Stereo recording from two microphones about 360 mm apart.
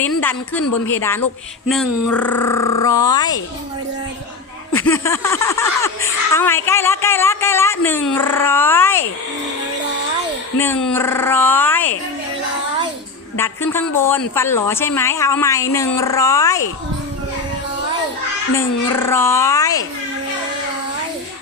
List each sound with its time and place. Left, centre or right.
0.0 s speech: centre
4.7 s speech: centre
10.6 s speech: centre
13.3 s speech: centre
18.5 s speech: centre